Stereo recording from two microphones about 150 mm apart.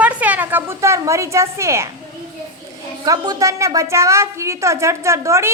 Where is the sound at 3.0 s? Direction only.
25° right (ahead or behind).